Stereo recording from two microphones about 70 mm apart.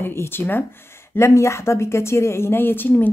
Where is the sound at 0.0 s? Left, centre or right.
Left.